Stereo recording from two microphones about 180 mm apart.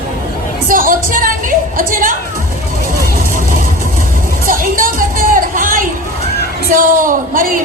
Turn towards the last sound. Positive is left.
turn(degrees=-50)  # may be behind; listen again after turning